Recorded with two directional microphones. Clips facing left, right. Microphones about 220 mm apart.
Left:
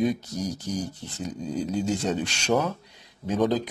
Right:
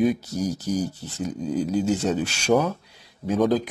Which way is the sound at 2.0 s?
10° right (ahead or behind).